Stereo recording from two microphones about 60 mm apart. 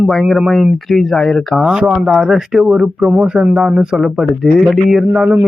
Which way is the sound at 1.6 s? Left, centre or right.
Centre.